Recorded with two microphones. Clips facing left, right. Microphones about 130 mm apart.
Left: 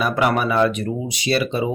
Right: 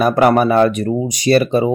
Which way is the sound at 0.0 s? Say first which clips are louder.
Right 7 dB; 45° right (ahead or behind).